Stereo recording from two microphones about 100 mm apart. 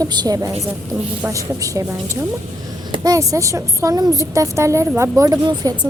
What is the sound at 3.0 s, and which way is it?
A woman's voice, 35° right (ahead or behind).